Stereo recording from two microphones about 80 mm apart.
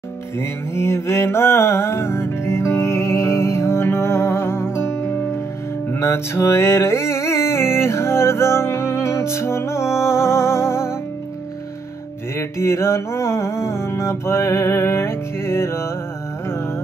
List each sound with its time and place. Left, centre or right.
0.4 s mantra: left
5.9 s music: left
12.4 s music: left